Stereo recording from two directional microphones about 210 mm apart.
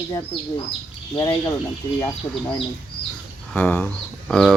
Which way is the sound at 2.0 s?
5° left (ahead or behind).